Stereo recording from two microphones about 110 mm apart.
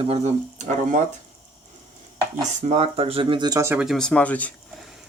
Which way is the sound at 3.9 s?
5° left (ahead or behind).